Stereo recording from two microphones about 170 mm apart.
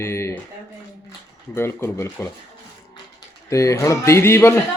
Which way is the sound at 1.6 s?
15° left (ahead or behind).